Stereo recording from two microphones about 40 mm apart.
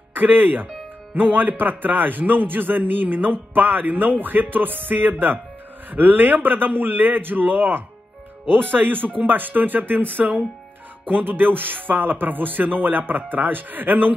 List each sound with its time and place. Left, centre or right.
0.1 s speech: right